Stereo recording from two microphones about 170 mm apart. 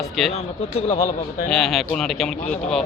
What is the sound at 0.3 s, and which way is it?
Speech, 40° left (ahead or behind).